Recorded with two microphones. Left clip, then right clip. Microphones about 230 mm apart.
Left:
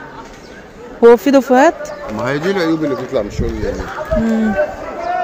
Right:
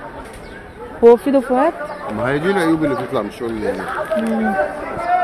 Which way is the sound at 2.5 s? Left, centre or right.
Centre.